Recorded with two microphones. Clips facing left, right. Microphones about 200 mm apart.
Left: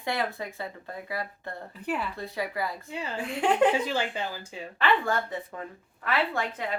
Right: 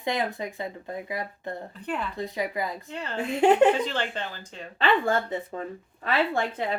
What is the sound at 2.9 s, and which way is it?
Speech, 10° left (ahead or behind).